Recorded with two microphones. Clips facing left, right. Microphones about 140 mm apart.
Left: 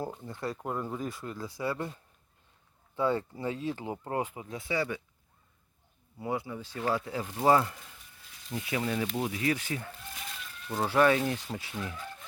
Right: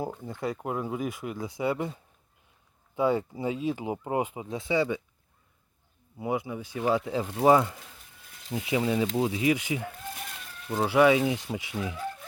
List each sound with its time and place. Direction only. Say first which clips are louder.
0.2 s speech: right 4 dB; 15° right (ahead or behind)
0.5 s speech: right 3 dB; 5° right (ahead or behind); by 5.0 s 20° right (ahead or behind)
6.1 s speech: right 4 dB; 15° right (ahead or behind)